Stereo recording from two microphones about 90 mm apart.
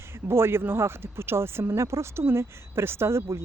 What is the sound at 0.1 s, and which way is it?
Speech, 25° right (ahead or behind).